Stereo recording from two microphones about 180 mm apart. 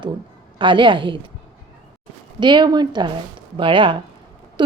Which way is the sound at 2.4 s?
25° right (ahead or behind).